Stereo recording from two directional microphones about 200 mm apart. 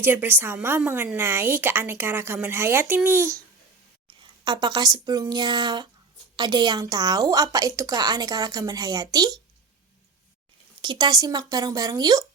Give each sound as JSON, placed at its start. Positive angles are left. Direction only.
{"t": 0.0, "sound": "a woman's voice", "side_deg": -10}
{"t": 4.2, "sound": "a woman's voice", "side_deg": -20}
{"t": 10.8, "sound": "a woman's voice", "side_deg": -20}